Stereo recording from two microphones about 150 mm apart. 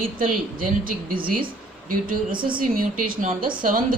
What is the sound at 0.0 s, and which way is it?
Speech, 70° right (ahead or behind).